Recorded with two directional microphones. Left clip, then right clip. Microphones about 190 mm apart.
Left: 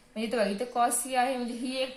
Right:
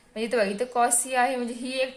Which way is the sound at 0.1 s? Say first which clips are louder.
Right 4 dB; 45° right (ahead or behind).